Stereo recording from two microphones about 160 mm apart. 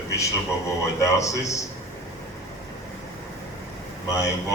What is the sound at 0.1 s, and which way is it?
A man's voice, 20° left (ahead or behind).